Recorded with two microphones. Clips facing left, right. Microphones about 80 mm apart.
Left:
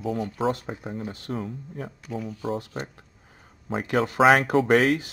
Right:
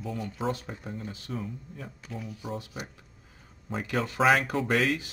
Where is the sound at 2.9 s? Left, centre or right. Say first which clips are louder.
Left 3 dB; left.